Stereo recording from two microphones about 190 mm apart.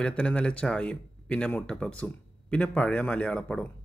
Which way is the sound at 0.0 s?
5° left (ahead or behind).